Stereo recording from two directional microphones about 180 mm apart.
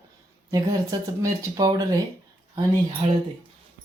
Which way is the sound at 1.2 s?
20° right (ahead or behind).